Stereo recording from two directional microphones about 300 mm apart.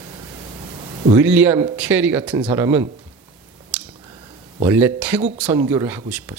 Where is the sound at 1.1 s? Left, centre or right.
Centre.